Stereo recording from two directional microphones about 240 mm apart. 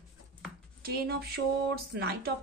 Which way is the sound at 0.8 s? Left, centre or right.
Right.